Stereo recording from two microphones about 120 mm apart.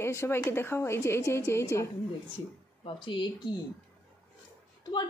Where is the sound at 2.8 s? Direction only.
45° left (ahead or behind).